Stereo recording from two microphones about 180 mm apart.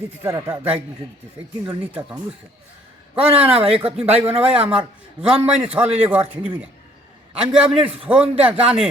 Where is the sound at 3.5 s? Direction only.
30° right (ahead or behind).